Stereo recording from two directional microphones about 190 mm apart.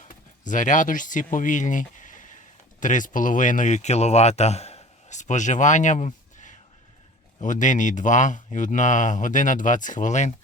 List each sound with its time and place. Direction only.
0.4 s speech: 40° left (ahead or behind)